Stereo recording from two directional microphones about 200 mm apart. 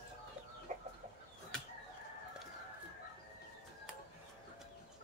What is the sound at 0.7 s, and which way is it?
Chicken, 35° right (ahead or behind).